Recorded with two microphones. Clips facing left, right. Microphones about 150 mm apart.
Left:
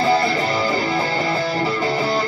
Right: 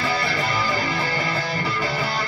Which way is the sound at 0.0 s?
30° left (ahead or behind).